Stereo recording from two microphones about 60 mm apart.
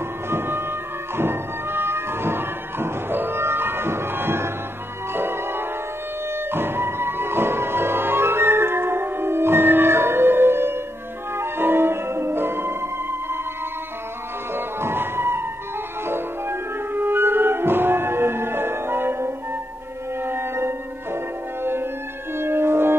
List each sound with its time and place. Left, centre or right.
0.3 s music: right
14.5 s music: right
22.4 s french horn: right